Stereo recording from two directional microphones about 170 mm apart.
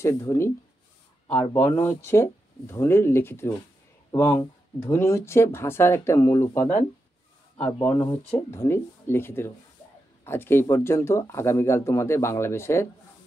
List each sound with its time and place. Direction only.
0.0 s speech: 15° left (ahead or behind)
1.5 s speech: 10° left (ahead or behind)